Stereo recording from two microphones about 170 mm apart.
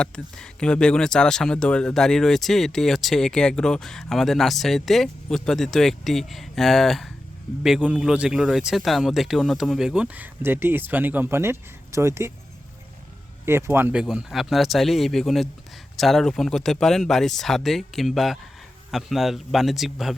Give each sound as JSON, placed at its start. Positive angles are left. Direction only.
{"t": 0.0, "sound": "speech", "side_deg": 5}
{"t": 13.4, "sound": "speech", "side_deg": -15}